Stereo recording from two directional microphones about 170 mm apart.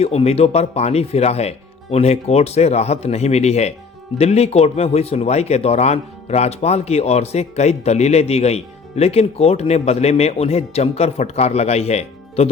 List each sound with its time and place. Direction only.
0.0 s speech: 35° left (ahead or behind)